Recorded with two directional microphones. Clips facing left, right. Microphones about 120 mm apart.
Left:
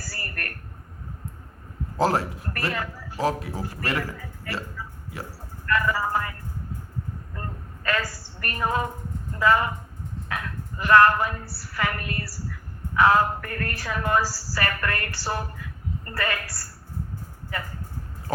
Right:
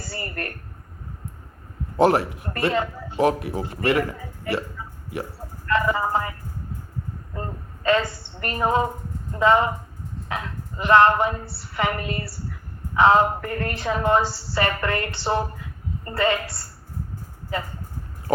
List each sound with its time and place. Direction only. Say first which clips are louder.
0.0 s a woman's voice: right 5 dB; 25° right (ahead or behind)
2.0 s a woman's voice: right 4 dB; 25° right (ahead or behind)
7.3 s a woman's voice: right 7 dB; 25° right (ahead or behind)